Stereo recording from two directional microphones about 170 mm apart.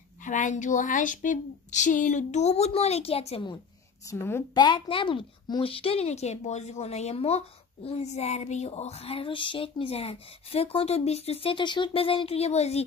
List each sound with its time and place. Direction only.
0.2 s speech: 50° left (ahead or behind)
4.0 s a woman's voice: 15° left (ahead or behind)
4.6 s a woman's voice: 25° left (ahead or behind)